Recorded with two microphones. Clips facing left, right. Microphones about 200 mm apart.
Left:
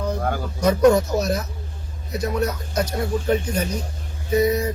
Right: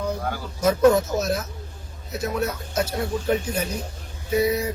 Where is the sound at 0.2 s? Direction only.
50° left (ahead or behind).